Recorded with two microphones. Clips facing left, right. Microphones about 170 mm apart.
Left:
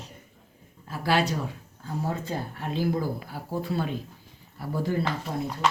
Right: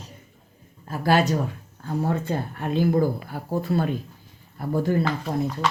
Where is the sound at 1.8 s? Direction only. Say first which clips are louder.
Right 5 dB; 60° right (ahead or behind).